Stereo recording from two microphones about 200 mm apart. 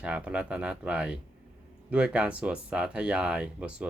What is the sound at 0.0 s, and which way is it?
Speech, 5° right (ahead or behind).